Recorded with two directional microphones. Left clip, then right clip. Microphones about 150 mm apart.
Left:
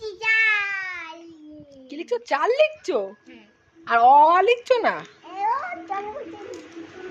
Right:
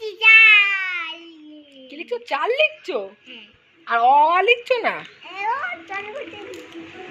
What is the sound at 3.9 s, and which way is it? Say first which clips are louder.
A woman's voice: left 1 dB; 35° left (ahead or behind).